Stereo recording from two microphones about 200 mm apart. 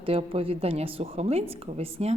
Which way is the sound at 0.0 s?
25° right (ahead or behind).